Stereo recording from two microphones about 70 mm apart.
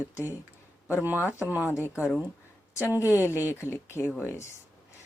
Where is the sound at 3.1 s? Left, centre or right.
Left.